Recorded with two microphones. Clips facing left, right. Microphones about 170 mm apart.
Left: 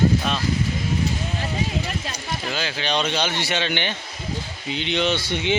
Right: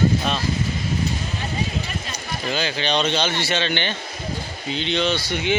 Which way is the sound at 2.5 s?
5° left (ahead or behind).